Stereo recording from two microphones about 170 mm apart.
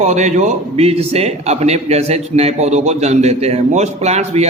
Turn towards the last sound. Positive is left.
turn(degrees=-40)  # may be behind; listen again after turning